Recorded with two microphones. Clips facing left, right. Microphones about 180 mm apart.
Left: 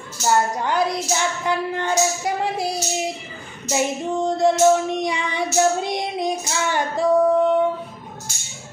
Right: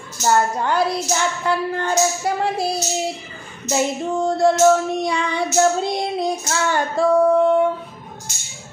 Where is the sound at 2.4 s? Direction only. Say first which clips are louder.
Right 2 dB; 15° left (ahead or behind).